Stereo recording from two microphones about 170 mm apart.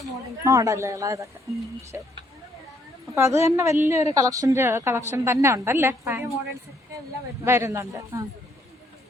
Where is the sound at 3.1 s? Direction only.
15° right (ahead or behind).